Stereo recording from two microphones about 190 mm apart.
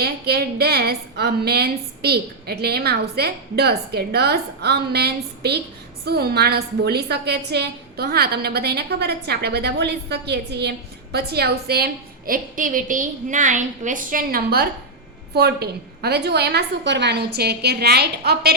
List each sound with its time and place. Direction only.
0.0 s a woman's voice: 55° right (ahead or behind)